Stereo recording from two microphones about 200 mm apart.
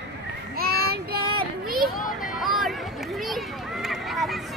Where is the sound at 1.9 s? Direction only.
Centre (ahead or behind).